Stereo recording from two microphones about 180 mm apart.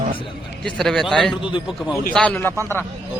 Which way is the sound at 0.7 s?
5° left (ahead or behind).